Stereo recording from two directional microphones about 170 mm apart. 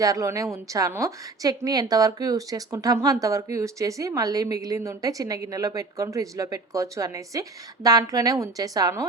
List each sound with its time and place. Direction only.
0.0 s a woman's voice: 20° right (ahead or behind)